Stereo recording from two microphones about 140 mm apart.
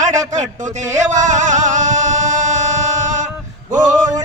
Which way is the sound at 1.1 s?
60° right (ahead or behind).